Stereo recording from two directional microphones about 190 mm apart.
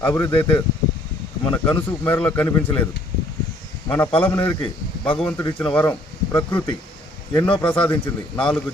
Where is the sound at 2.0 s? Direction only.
10° left (ahead or behind).